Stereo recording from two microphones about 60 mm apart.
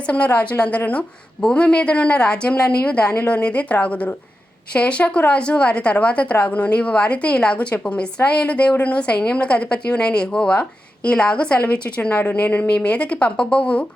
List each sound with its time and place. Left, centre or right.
0.1 s a woman's voice: left